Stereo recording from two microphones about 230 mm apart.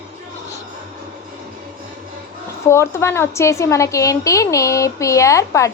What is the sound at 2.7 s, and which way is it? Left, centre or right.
A woman's voice, centre.